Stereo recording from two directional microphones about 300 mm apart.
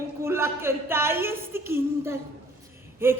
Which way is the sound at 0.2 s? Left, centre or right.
Centre.